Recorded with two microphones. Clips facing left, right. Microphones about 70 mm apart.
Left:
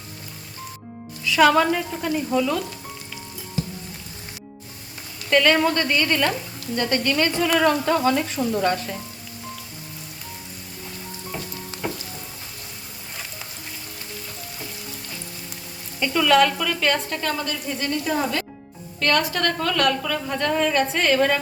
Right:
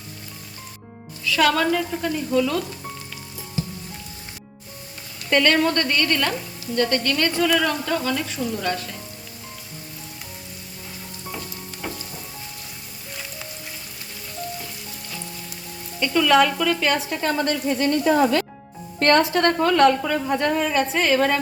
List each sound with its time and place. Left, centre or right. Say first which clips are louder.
1.2 s a woman's voice: left 3 dB; centre
5.3 s a woman's voice: even; centre; by 9.0 s left
16.0 s frying: even; centre
17.3 s speech: right 6 dB; right
18.9 s a woman's voice: right 4 dB; right
19.2 s a woman's voice: right 5 dB; right
20.5 s frying: even; centre